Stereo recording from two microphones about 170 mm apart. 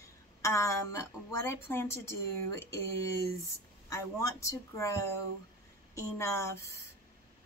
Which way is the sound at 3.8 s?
20° left (ahead or behind).